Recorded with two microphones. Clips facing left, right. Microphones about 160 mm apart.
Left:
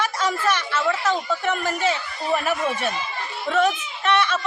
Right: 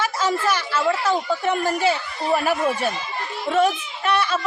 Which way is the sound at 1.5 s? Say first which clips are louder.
Right 3 dB; 35° right (ahead or behind).